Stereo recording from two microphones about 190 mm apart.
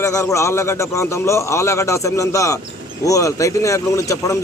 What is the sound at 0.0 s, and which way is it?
A man's voice, 15° left (ahead or behind).